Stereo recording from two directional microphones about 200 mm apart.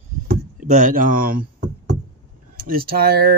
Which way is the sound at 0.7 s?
40° right (ahead or behind).